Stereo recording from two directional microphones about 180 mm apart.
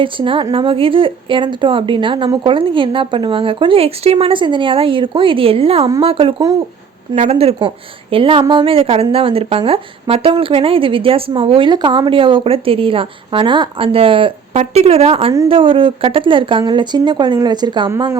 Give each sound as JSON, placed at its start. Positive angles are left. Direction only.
{"t": 0.0, "sound": "speech", "side_deg": -30}
{"t": 7.2, "sound": "a woman's voice", "side_deg": -35}